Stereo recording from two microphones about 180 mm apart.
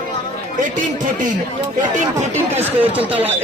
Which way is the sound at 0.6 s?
45° right (ahead or behind).